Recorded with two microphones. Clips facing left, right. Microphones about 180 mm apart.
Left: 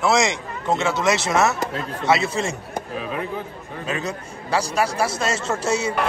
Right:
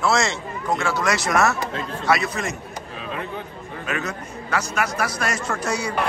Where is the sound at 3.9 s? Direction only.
30° left (ahead or behind).